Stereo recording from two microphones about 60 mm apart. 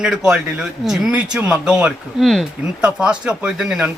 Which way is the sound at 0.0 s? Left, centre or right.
Centre.